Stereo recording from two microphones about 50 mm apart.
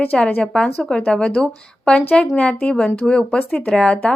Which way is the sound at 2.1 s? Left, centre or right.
Left.